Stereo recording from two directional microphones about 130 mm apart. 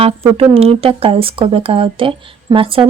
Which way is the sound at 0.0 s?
50° right (ahead or behind).